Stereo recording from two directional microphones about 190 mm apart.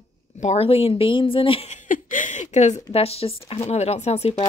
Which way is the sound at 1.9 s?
45° left (ahead or behind).